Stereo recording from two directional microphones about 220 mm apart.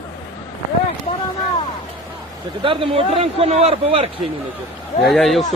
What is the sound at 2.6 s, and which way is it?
Speech, 25° right (ahead or behind).